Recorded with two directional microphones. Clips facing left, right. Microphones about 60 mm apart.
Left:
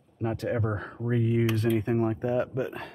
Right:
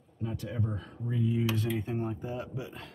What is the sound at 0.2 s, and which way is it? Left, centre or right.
Speech, left.